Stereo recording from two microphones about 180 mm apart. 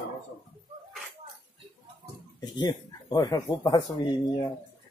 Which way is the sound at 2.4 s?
25° left (ahead or behind).